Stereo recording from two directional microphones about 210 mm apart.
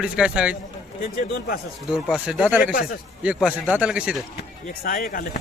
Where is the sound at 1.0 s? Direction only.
45° left (ahead or behind).